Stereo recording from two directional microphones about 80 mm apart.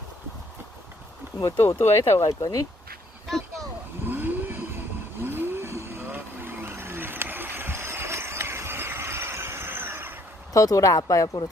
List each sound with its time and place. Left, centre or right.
1.5 s speech: left
3.2 s a sound: centre
4.1 s vehicle: right
10.5 s speech: left